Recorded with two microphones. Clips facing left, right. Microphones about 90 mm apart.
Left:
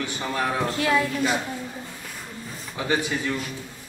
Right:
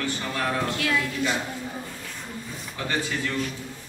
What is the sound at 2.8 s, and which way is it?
Speech, 15° left (ahead or behind).